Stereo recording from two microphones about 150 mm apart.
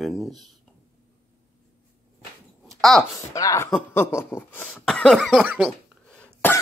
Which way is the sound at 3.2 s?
20° left (ahead or behind).